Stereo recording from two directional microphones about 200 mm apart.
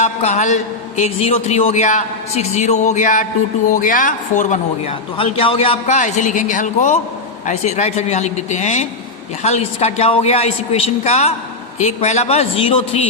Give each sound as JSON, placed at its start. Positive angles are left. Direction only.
{"t": 0.0, "sound": "a man's voice", "side_deg": 35}